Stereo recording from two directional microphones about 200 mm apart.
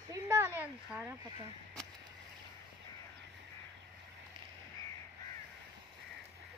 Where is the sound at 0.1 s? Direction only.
15° right (ahead or behind).